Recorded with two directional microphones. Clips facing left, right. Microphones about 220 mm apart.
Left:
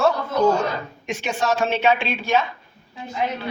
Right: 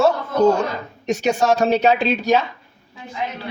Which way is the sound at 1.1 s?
40° right (ahead or behind).